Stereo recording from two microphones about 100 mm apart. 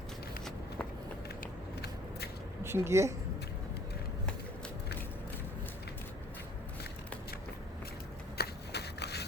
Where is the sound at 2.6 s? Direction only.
25° right (ahead or behind).